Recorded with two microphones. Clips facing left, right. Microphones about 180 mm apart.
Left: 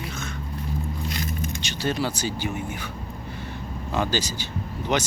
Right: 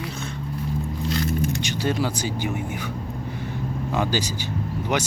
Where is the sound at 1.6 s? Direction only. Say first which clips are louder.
Right 2 dB; 15° right (ahead or behind).